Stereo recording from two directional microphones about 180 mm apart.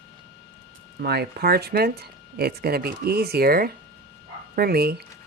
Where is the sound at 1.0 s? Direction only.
60° right (ahead or behind).